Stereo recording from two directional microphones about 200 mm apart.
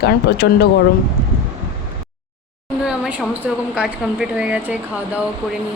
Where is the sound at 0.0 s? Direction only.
55° left (ahead or behind).